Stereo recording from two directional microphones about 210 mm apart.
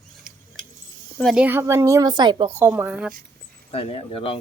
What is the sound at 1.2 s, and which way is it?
A woman's voice, 5° right (ahead or behind).